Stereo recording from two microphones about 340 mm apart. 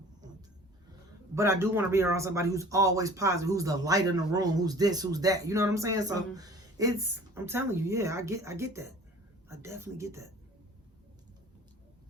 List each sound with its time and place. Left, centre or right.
1.4 s speech: centre